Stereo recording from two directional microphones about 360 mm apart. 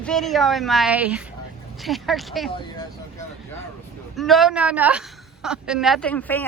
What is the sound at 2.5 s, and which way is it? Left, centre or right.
Speech, centre.